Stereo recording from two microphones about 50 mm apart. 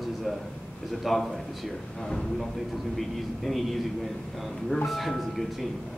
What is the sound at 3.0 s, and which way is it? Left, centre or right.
Speech, centre.